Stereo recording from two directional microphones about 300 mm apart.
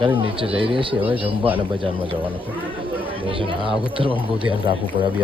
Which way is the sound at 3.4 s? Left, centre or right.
Centre.